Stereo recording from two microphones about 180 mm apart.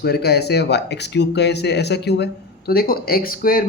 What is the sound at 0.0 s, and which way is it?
Speech, 60° left (ahead or behind).